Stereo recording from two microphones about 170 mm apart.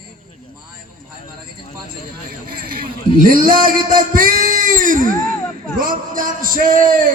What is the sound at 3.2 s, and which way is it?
Speech, 55° right (ahead or behind).